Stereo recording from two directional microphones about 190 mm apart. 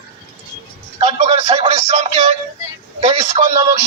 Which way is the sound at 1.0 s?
35° right (ahead or behind).